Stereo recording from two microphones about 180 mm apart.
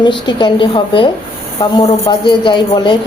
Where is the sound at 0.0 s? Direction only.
25° left (ahead or behind).